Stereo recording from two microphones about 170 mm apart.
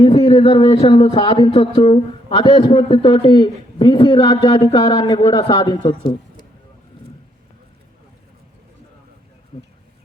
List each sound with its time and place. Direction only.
0.0 s a man's voice: 35° left (ahead or behind)